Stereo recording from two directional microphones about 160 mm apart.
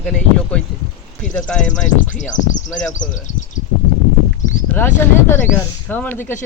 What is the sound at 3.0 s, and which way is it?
Speech, 50° left (ahead or behind).